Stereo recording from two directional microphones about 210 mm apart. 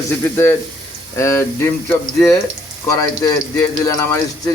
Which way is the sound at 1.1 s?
15° left (ahead or behind).